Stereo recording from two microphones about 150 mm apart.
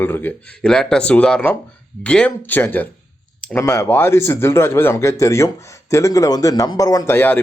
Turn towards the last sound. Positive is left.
turn(degrees=15)  # may be behind; listen again after turning